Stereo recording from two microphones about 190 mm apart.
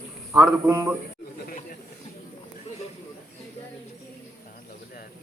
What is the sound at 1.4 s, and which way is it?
Snake, 45° left (ahead or behind).